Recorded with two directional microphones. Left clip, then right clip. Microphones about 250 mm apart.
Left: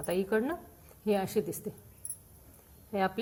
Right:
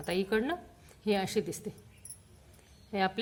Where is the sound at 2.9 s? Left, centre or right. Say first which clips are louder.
Even; centre.